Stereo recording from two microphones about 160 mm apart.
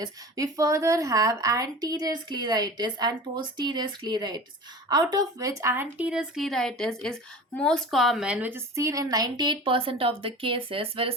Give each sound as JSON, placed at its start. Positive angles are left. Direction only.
{"t": 0.0, "sound": "speech", "side_deg": -20}